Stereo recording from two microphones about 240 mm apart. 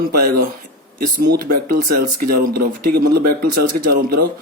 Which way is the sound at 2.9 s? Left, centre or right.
Right.